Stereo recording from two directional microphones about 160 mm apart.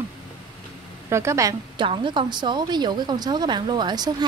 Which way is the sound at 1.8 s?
30° right (ahead or behind).